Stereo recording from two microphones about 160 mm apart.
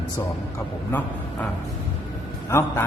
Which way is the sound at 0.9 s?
10° left (ahead or behind).